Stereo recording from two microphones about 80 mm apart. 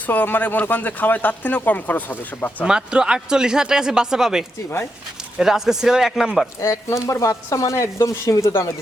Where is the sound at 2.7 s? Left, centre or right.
Centre.